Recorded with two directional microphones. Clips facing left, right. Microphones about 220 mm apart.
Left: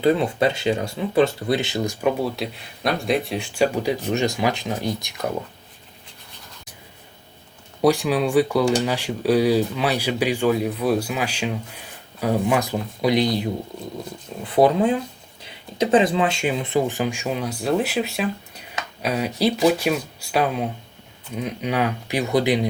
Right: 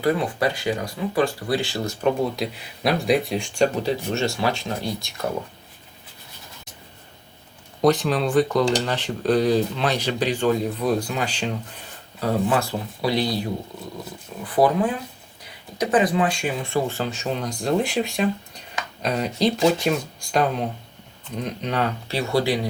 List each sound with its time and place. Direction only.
0.0 s speech: 25° left (ahead or behind)
7.8 s speech: 10° left (ahead or behind)